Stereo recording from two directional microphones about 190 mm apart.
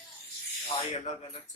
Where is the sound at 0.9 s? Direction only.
35° left (ahead or behind).